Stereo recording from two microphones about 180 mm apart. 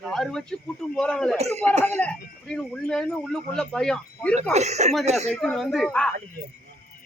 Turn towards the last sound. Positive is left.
turn(degrees=5)  # may be behind; listen again after turning